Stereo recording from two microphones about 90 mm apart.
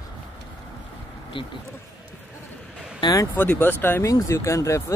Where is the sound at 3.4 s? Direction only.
20° left (ahead or behind).